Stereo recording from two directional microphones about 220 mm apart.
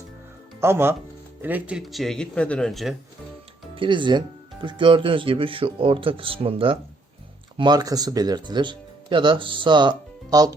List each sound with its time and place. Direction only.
0.6 s speech: 10° right (ahead or behind)
3.8 s speech: 20° right (ahead or behind)